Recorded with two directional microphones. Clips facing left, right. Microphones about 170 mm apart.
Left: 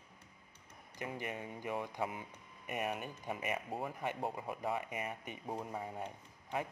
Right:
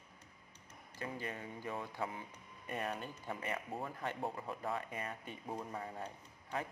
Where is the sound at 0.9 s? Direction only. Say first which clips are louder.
Left 1 dB; 20° left (ahead or behind).